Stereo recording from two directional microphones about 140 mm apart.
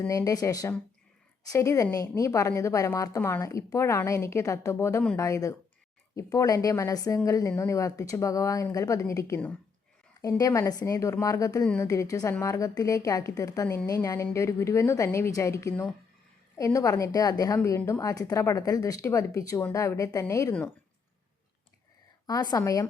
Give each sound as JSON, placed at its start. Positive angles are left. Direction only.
{"t": 0.1, "sound": "a woman's voice", "side_deg": 25}
{"t": 22.3, "sound": "a woman's voice", "side_deg": 30}